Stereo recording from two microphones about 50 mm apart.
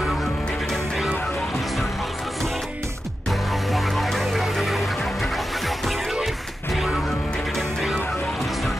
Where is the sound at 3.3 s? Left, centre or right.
Centre.